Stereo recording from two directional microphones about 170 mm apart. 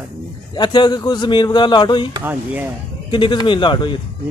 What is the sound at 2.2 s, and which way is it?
Speech, 10° right (ahead or behind).